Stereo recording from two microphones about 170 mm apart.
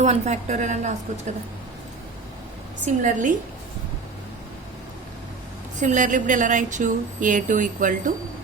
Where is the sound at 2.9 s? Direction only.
50° right (ahead or behind).